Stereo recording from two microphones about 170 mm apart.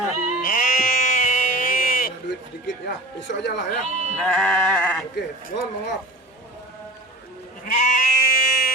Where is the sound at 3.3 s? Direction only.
90° left.